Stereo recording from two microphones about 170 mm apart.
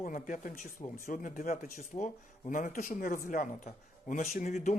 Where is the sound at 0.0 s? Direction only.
50° left (ahead or behind).